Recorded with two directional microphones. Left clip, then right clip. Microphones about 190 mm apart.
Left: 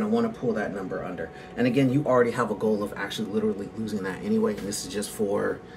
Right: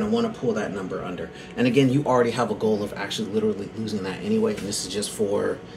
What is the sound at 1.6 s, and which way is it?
Speech, 15° right (ahead or behind).